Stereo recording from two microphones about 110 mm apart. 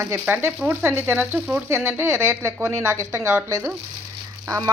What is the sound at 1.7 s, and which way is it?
Speech, 25° right (ahead or behind).